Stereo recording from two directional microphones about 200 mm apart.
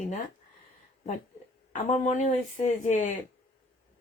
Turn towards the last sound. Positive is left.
turn(degrees=35)  # may be behind; listen again after turning